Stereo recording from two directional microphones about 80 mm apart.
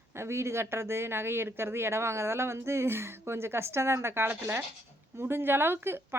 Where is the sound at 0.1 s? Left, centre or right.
Right.